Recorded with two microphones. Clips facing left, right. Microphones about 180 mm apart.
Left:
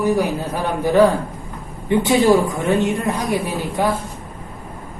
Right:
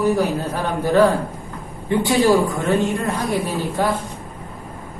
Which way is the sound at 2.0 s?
20° left (ahead or behind).